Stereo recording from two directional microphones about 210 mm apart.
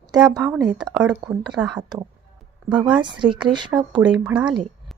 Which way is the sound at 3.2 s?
25° right (ahead or behind).